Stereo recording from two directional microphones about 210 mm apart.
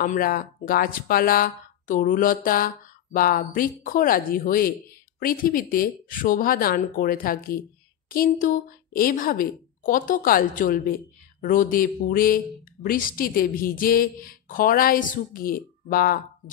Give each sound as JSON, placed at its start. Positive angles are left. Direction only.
{"t": 0.0, "sound": "a woman's voice", "side_deg": 40}